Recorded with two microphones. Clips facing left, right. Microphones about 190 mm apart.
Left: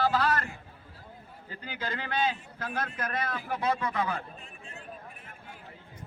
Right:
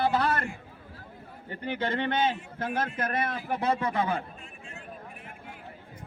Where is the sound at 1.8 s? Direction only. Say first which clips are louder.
Right 4 dB; 25° right (ahead or behind).